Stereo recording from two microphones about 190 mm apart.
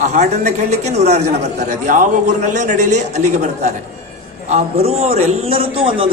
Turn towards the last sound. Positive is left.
turn(degrees=-30)  # may be behind; listen again after turning